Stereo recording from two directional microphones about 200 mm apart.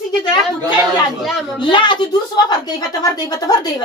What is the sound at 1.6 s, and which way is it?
A woman's voice, 25° left (ahead or behind).